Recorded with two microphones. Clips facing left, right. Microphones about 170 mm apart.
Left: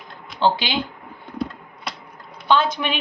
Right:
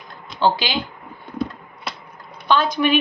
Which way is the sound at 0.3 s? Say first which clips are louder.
Right 1 dB; 20° left (ahead or behind).